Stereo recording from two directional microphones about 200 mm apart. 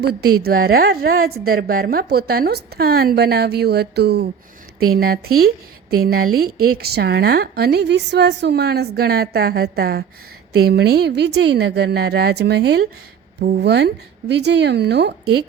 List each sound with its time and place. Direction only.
0.0 s a woman's voice: 50° right (ahead or behind)